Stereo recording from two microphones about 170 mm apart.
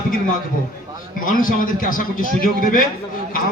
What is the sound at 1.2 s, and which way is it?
A man's voice, 55° left (ahead or behind).